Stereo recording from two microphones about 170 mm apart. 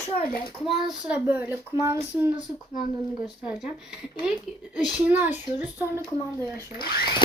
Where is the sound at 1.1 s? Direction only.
10° right (ahead or behind).